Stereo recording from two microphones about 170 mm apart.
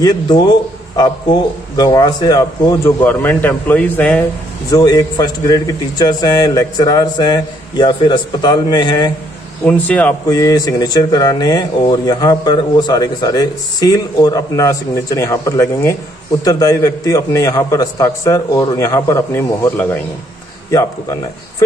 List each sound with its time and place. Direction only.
0.0 s speech: 25° left (ahead or behind)
4.6 s speech: 20° left (ahead or behind)
9.7 s speech: 10° left (ahead or behind)
10.2 s speech: 20° left (ahead or behind)